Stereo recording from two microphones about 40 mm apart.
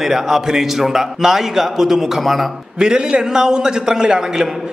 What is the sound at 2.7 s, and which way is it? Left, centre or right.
A man's voice, right.